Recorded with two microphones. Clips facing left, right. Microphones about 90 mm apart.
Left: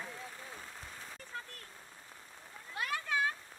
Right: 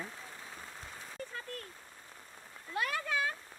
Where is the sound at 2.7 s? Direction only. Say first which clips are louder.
Right 3 dB; 70° right (ahead or behind).